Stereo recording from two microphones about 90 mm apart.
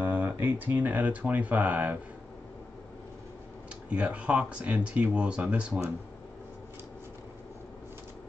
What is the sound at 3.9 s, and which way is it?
Speech, 15° right (ahead or behind).